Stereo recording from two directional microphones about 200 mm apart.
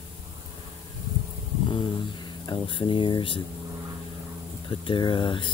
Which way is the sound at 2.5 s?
25° left (ahead or behind).